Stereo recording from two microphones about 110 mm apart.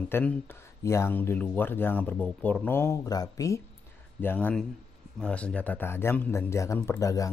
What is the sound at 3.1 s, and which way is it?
Speech, 35° left (ahead or behind).